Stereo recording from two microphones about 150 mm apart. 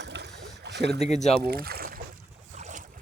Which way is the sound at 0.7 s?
90° right.